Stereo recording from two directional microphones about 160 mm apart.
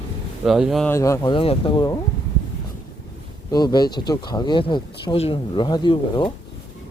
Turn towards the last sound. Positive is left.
turn(degrees=30)  # may be behind; listen again after turning